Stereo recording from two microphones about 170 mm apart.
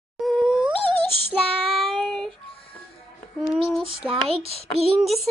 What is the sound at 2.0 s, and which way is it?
Child singing, centre (ahead or behind).